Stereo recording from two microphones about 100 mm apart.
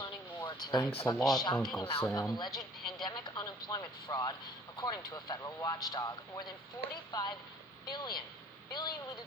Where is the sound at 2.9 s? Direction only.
45° left (ahead or behind).